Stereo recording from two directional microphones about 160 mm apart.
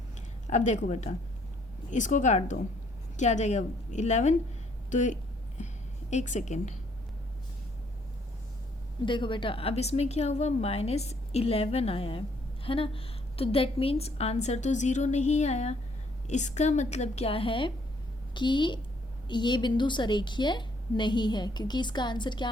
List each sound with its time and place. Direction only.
0.5 s a woman's voice: 45° left (ahead or behind)
9.0 s a woman's voice: 30° left (ahead or behind)